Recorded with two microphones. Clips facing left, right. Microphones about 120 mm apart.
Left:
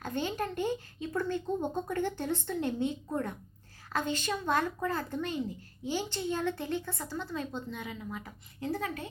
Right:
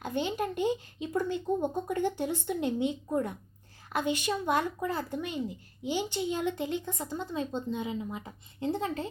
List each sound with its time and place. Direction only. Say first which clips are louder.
0.0 s speech: right 2 dB; 15° right (ahead or behind)